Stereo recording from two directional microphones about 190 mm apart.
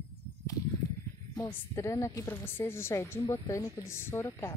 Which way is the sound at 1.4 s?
15° left (ahead or behind).